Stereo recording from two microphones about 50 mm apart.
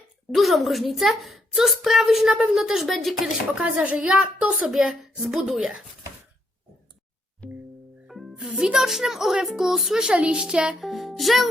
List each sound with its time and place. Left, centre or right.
0.3 s a child's voice: centre
3.5 s speech: right
4.7 s a woman's voice: centre
7.4 s music: left
8.0 s music: centre
8.4 s a woman's voice: centre
10.2 s speech: right
10.8 s a child's voice: centre